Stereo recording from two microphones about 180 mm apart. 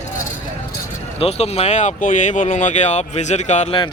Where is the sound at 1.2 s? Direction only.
35° left (ahead or behind).